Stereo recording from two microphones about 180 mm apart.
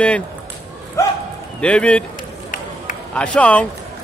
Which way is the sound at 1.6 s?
5° left (ahead or behind).